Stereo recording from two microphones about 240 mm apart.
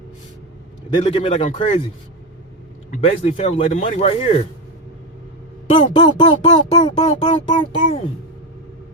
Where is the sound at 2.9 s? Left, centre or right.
Left.